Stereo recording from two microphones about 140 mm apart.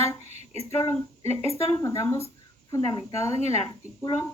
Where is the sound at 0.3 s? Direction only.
45° right (ahead or behind).